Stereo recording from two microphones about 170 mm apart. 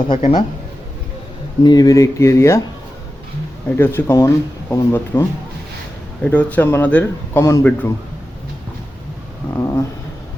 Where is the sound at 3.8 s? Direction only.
15° left (ahead or behind).